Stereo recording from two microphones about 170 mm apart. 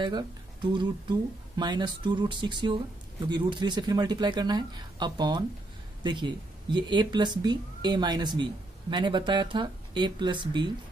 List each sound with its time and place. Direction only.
0.0 s speech: 25° right (ahead or behind)